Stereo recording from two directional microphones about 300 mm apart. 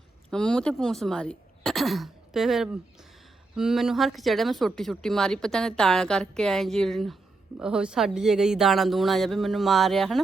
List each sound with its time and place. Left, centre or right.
0.3 s speech: centre